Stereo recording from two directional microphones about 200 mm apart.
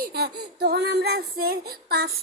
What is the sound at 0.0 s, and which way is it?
Child singing, 55° right (ahead or behind).